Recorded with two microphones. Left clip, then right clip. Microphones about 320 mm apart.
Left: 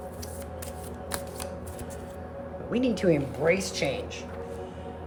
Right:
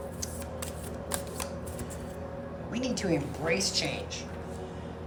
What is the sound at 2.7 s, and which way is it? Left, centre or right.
Speech, centre.